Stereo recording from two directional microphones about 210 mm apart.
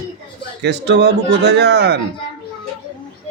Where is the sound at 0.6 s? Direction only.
55° right (ahead or behind).